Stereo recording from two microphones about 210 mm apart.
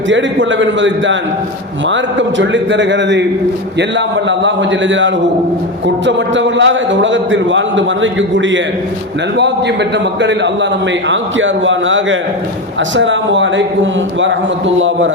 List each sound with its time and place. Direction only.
0.1 s a man's voice: 60° right (ahead or behind)
10.2 s a man's voice: 60° right (ahead or behind)
14.8 s a man's voice: 65° right (ahead or behind)